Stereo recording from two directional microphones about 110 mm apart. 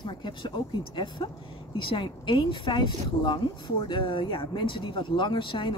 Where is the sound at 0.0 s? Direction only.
45° left (ahead or behind).